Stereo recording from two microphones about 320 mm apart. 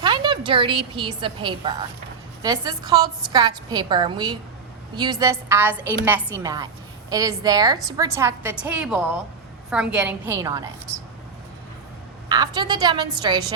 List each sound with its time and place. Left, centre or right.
0.0 s a woman's voice: centre
12.3 s a woman's voice: centre